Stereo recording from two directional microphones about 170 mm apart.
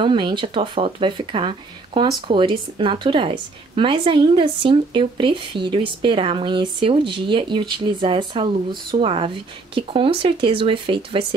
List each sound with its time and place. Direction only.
0.0 s speech: 30° right (ahead or behind)